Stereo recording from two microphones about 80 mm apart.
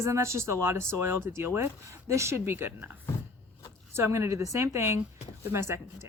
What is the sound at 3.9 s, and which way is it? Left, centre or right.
A woman's voice, right.